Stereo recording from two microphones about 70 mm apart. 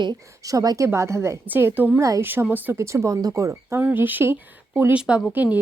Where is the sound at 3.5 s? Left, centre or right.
Right.